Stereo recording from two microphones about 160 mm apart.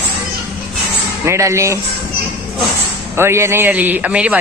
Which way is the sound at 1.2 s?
20° right (ahead or behind).